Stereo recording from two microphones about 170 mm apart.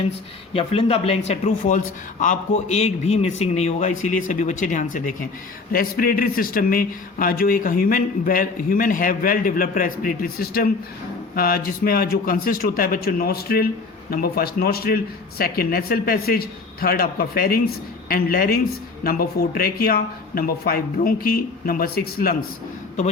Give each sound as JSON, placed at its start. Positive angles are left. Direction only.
{"t": 0.5, "sound": "speech", "side_deg": 35}
{"t": 1.3, "sound": "a man's voice", "side_deg": 45}
{"t": 5.7, "sound": "speech", "side_deg": 60}